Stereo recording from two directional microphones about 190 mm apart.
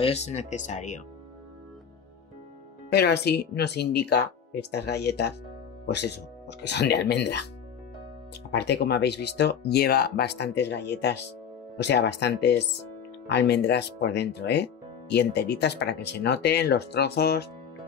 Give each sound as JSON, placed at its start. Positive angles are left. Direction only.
{"t": 0.0, "sound": "speech", "side_deg": 35}
{"t": 2.9, "sound": "speech", "side_deg": 60}
{"t": 8.5, "sound": "speech", "side_deg": 60}